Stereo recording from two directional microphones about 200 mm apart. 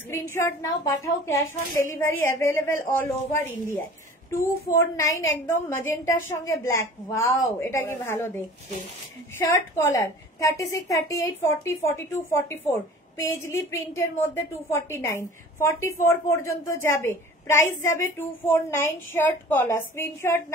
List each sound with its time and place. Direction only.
0.1 s a woman's voice: 10° left (ahead or behind)
9.4 s a woman's voice: 10° left (ahead or behind)